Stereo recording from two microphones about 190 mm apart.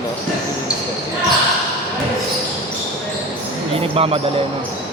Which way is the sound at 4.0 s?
30° right (ahead or behind).